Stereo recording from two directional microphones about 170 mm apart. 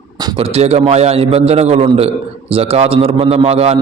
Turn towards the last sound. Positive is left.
turn(degrees=-35)  # may be behind; listen again after turning